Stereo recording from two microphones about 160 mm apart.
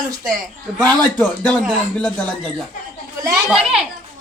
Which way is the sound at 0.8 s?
10° left (ahead or behind).